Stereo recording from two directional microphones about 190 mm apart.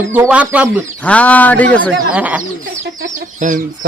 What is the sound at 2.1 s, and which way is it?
Speech, 10° right (ahead or behind).